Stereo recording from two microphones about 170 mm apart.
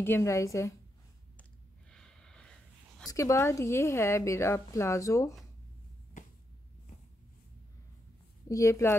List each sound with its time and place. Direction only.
0.0 s speech: 15° left (ahead or behind)
1.9 s a sound: 5° left (ahead or behind)
3.1 s speech: 20° left (ahead or behind)
8.5 s speech: 20° left (ahead or behind)